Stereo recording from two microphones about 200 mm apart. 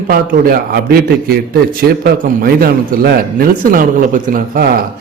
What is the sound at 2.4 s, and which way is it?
A man's voice, 50° right (ahead or behind).